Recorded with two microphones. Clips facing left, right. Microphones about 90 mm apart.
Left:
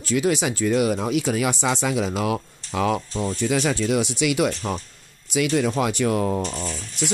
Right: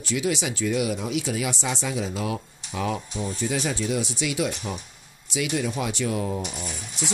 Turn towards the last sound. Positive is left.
turn(degrees=-15)  # may be behind; listen again after turning